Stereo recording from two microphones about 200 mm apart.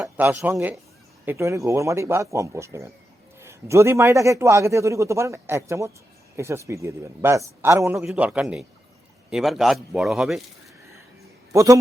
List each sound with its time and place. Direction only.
0.0 s a man's voice: 10° right (ahead or behind)
11.5 s a man's voice: 15° right (ahead or behind)